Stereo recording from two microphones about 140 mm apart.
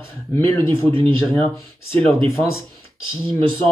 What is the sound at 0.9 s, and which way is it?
Speech, 35° right (ahead or behind).